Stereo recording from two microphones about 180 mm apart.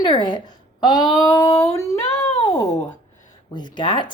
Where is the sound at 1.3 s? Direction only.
15° left (ahead or behind).